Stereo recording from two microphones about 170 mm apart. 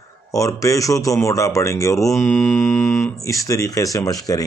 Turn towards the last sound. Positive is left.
turn(degrees=20)  # may be behind; listen again after turning